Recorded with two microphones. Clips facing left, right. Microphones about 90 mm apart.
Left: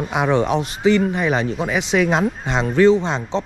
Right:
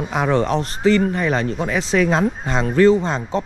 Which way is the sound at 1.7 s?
35° right (ahead or behind).